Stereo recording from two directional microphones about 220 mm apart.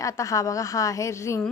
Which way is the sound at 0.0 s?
15° left (ahead or behind).